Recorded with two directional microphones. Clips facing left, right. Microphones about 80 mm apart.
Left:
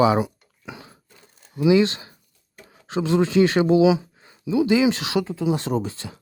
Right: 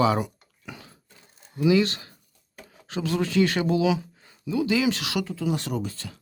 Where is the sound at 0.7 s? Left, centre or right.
Centre.